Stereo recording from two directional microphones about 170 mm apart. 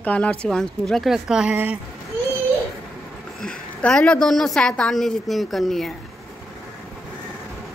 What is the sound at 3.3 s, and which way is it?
Speech, 5° left (ahead or behind).